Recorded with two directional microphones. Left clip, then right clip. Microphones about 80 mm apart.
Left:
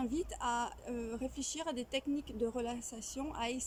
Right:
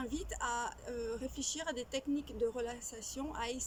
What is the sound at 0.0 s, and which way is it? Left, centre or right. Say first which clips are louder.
Speech: left 2 dB; left.